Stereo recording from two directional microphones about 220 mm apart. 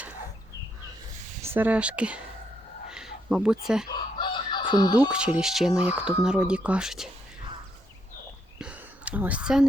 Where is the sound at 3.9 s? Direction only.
20° left (ahead or behind).